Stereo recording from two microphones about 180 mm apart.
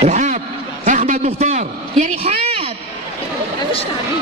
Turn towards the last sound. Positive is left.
turn(degrees=-35)  # may be behind; listen again after turning